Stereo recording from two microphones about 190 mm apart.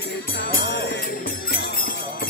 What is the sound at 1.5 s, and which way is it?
Jingle bell, 50° left (ahead or behind).